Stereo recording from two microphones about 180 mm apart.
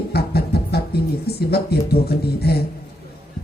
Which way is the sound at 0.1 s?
60° left (ahead or behind).